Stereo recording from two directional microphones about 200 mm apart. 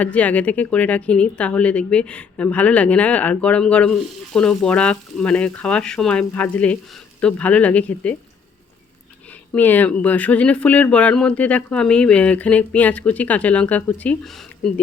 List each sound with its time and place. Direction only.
0.0 s a woman's voice: 5° left (ahead or behind)
9.5 s a woman's voice: 10° left (ahead or behind)